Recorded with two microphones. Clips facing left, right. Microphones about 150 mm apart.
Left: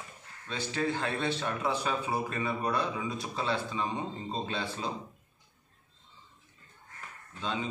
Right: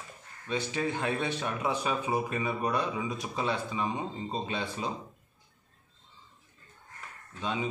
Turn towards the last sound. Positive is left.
turn(degrees=-15)  # may be behind; listen again after turning